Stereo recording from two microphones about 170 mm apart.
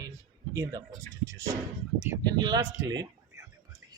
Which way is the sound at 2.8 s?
25° right (ahead or behind).